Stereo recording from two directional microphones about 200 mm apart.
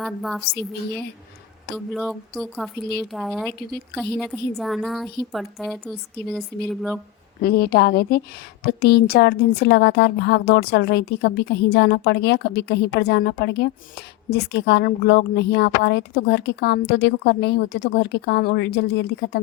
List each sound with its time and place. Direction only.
0.0 s a woman's voice: centre (ahead or behind)
1.7 s a woman's voice: centre (ahead or behind)
7.4 s a woman's voice: 50° left (ahead or behind)